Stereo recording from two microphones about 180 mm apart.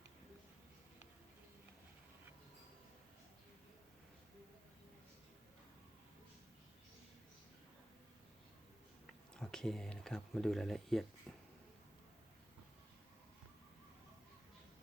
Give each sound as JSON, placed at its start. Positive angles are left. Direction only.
{"t": 9.3, "sound": "speech", "side_deg": 5}